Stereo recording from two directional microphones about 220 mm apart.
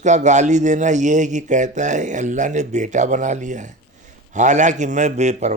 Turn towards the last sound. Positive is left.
turn(degrees=-30)  # may be behind; listen again after turning